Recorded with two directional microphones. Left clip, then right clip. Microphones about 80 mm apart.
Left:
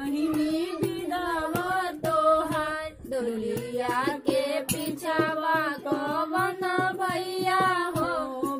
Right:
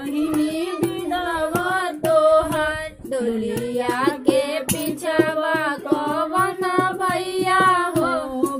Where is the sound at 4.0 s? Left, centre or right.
Centre.